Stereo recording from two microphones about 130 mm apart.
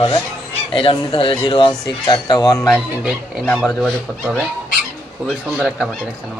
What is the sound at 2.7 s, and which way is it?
Speech, 5° right (ahead or behind).